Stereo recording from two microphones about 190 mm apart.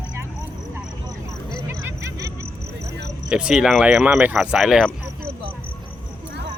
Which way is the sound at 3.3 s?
5° right (ahead or behind).